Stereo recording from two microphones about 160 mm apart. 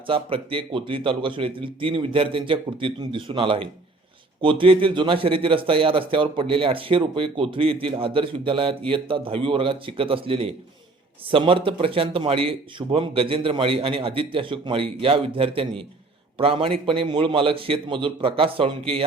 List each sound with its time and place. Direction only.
0.1 s a man's voice: 35° right (ahead or behind)